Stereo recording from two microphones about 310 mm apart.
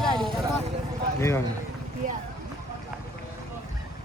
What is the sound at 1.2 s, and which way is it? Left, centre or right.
Speech, centre.